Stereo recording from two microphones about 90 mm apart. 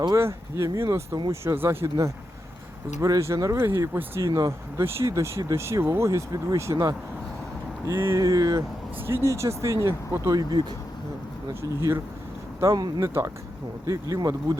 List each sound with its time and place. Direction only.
0.2 s speech: 30° right (ahead or behind)
4.3 s speech: 40° right (ahead or behind)
4.8 s speech: 30° right (ahead or behind)
8.2 s speech: 40° right (ahead or behind)
9.0 s speech: 30° right (ahead or behind)
11.6 s speech: 35° right (ahead or behind)
12.5 s speech: 45° right (ahead or behind)
13.0 s speech: 30° right (ahead or behind)